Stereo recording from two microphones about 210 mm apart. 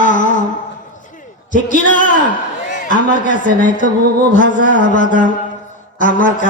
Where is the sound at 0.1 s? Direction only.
40° left (ahead or behind).